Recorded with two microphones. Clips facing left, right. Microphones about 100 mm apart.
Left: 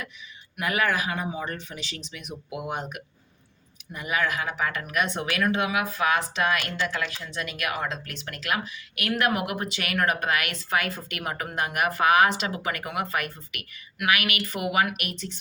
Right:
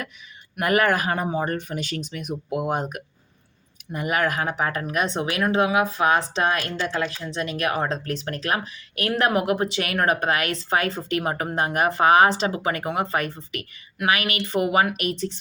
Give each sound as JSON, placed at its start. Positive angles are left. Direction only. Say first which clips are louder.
{"t": 0.5, "sound": "speech", "louder": "right 5 dB", "side_deg": -55}